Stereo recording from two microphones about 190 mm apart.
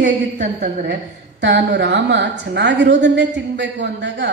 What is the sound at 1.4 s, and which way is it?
A woman's voice, 70° right (ahead or behind).